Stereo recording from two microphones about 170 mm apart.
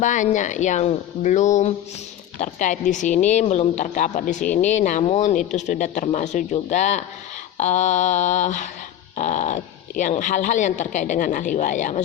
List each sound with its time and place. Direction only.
0.0 s speech: 45° left (ahead or behind)